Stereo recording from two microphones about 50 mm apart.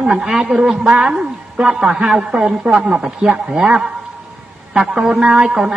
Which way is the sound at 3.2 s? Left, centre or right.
Right.